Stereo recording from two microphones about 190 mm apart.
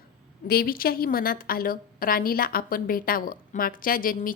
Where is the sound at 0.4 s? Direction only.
55° left (ahead or behind).